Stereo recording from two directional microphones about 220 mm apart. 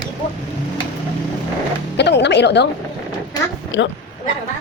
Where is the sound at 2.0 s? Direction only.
50° left (ahead or behind).